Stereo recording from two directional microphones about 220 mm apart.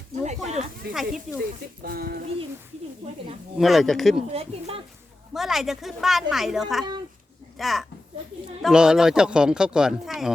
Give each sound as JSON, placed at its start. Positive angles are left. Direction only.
{"t": 0.3, "sound": "a sound", "side_deg": -30}
{"t": 0.9, "sound": "speech", "side_deg": 0}
{"t": 1.8, "sound": "a sound", "side_deg": -45}
{"t": 3.6, "sound": "speech", "side_deg": 0}
{"t": 4.3, "sound": "speech", "side_deg": -25}
{"t": 5.3, "sound": "speech", "side_deg": 0}